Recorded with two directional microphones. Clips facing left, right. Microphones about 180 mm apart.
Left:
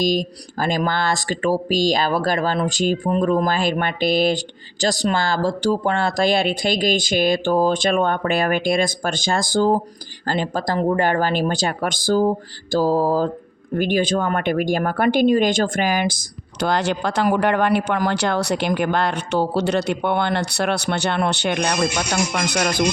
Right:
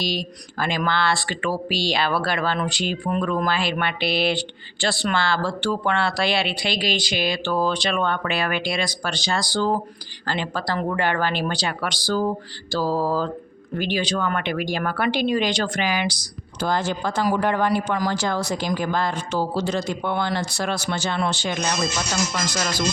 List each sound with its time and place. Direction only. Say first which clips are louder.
0.0 s speech: left 7 dB; 45° left (ahead or behind)
16.6 s speech: left 3 dB; 75° left (ahead or behind)